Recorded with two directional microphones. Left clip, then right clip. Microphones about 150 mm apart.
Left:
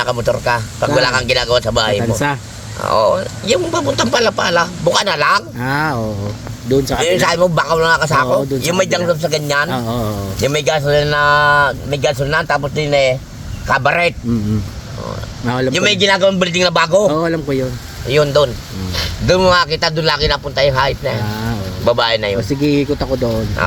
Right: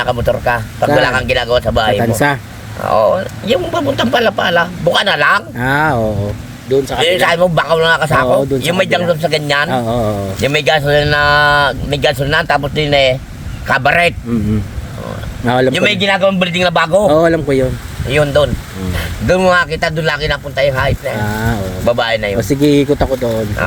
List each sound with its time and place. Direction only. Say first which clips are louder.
0.0 s speech: right 2 dB; centre (ahead or behind)
2.8 s a man's voice: right 2 dB; centre (ahead or behind)
15.4 s a man's voice: right 6 dB; 15° right (ahead or behind)
15.7 s speech: even; 5° left (ahead or behind)
17.0 s a man's voice: right 5 dB; 15° right (ahead or behind)
18.1 s speech: right 1 dB; centre (ahead or behind)
21.2 s speech: right 5 dB; 20° right (ahead or behind)
21.8 s speech: even; centre (ahead or behind)
22.4 s speech: right 4 dB; 20° right (ahead or behind)
23.6 s speech: left 2 dB; centre (ahead or behind)